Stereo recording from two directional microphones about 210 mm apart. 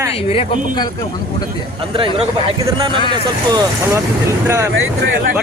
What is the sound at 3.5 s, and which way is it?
A man's voice, 15° right (ahead or behind).